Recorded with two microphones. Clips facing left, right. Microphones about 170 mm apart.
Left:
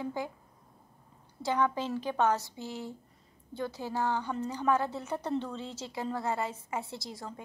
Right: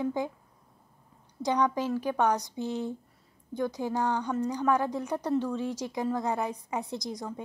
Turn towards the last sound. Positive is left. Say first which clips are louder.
# right 6 dB
turn(degrees=-15)  # may be behind; listen again after turning